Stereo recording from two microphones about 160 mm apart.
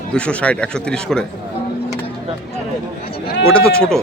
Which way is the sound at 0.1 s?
5° left (ahead or behind).